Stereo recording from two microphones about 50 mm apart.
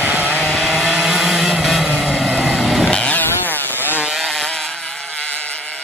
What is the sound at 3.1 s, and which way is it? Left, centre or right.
Chainsaw, left.